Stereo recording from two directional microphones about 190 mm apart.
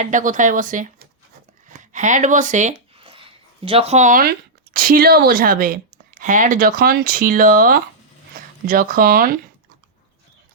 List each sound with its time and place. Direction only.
0.0 s speech: 45° right (ahead or behind)
3.0 s a sound: 30° right (ahead or behind)
3.7 s speech: 30° right (ahead or behind); by 9.4 s 50° right (ahead or behind)